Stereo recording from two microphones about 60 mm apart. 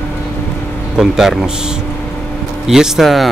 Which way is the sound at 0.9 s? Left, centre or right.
Centre.